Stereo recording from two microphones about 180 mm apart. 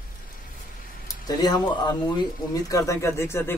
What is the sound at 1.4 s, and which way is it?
Speech, 20° left (ahead or behind).